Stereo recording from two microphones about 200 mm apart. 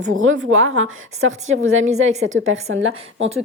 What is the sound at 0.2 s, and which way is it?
A woman's voice, 80° right.